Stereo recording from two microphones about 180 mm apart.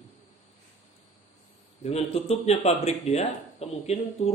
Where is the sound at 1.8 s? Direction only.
35° left (ahead or behind).